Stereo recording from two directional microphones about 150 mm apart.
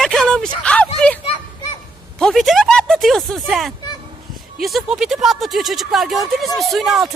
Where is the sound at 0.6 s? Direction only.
10° left (ahead or behind).